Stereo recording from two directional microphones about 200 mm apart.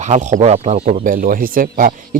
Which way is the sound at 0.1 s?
35° right (ahead or behind).